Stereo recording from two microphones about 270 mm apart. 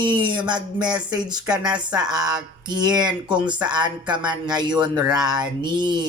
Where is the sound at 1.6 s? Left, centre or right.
Centre.